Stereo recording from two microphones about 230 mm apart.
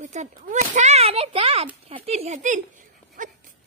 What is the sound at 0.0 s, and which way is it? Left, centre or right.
Speech, right.